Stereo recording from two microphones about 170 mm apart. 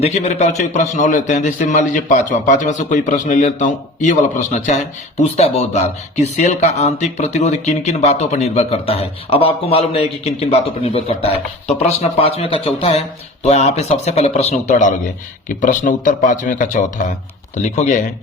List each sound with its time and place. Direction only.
0.0 s a man's voice: 40° left (ahead or behind)